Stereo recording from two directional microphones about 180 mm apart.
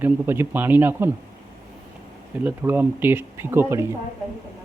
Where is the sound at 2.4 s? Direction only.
10° right (ahead or behind).